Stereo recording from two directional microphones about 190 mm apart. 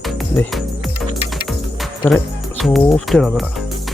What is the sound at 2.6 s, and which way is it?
Speech, centre (ahead or behind).